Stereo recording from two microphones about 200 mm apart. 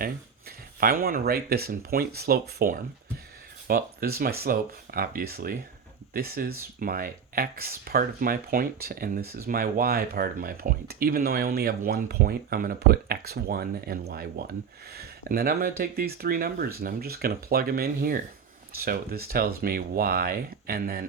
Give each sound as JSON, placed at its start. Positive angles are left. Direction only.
{"t": 0.8, "sound": "speech", "side_deg": -45}